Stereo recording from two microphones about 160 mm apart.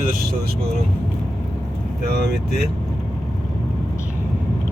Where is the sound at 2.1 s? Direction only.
90° right.